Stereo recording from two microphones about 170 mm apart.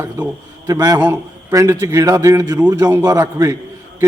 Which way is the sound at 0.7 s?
20° right (ahead or behind).